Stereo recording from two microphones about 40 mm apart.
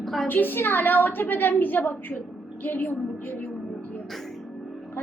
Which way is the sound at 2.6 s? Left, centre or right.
Left.